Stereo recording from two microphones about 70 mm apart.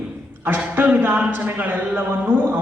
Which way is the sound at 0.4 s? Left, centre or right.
Right.